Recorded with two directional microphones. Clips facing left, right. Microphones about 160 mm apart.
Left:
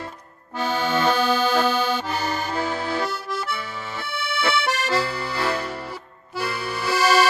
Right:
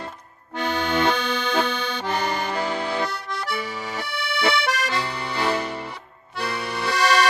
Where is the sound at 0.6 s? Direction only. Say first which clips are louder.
Even; 5° left (ahead or behind).